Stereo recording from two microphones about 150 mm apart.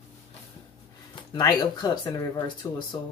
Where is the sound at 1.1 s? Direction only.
25° left (ahead or behind).